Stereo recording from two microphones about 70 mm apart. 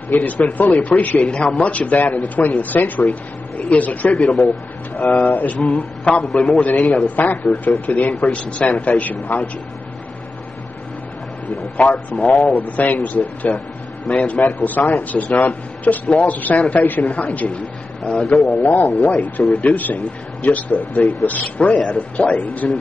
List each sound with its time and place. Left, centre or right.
0.1 s a man's voice: left
8.1 s a man's voice: centre
11.7 s a man's voice: centre
14.4 s a man's voice: left
18.6 s a man's voice: left